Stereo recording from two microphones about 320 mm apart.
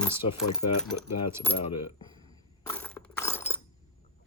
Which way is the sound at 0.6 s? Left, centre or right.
Left.